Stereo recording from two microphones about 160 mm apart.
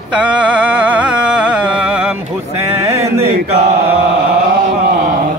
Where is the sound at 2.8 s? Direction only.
15° right (ahead or behind).